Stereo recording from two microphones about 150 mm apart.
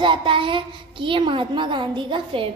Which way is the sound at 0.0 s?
35° right (ahead or behind).